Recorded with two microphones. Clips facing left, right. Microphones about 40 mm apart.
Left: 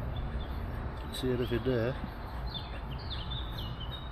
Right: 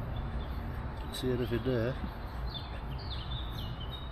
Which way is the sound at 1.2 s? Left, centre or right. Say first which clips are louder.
Left 1 dB; centre.